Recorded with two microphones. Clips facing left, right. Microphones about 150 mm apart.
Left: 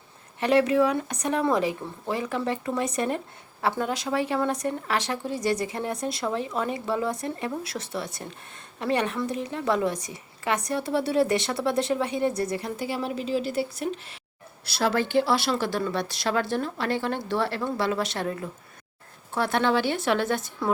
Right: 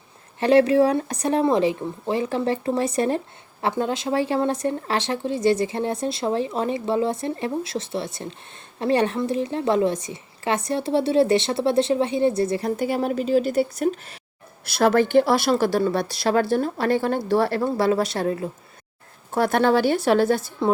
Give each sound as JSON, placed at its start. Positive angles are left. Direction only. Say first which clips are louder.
{"t": 0.3, "sound": "speech", "louder": "right 5 dB", "side_deg": -30}
{"t": 12.6, "sound": "speech", "louder": "right 7 dB", "side_deg": -50}
{"t": 19.3, "sound": "speech", "louder": "right 5 dB", "side_deg": -45}